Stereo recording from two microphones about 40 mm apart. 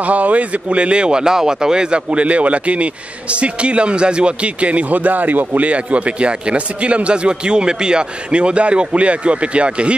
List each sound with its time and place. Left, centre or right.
0.0 s speech: right